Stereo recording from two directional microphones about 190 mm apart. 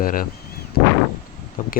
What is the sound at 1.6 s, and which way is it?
Speech, 45° left (ahead or behind).